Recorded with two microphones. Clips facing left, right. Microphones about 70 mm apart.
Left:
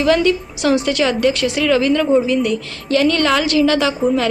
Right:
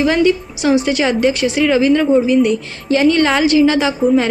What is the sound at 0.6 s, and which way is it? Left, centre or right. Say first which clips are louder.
A woman's voice: right 2 dB; centre.